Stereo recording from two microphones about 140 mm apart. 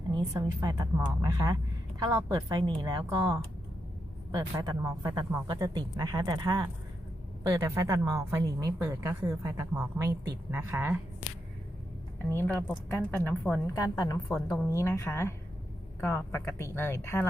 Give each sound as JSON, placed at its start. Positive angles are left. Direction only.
{"t": 0.1, "sound": "speech", "side_deg": -25}
{"t": 12.2, "sound": "speech", "side_deg": 15}
{"t": 13.7, "sound": "a woman's voice", "side_deg": 25}